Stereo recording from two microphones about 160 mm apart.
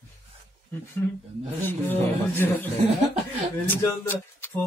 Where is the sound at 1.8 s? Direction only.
10° left (ahead or behind).